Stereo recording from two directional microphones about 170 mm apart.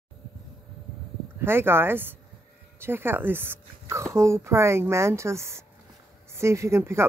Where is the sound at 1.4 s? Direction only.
15° right (ahead or behind).